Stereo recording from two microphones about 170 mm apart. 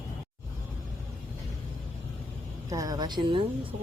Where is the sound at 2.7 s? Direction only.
20° right (ahead or behind).